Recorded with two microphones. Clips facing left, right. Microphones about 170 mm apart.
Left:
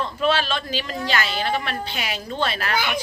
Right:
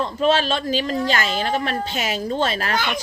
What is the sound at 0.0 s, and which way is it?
Speech, 40° right (ahead or behind).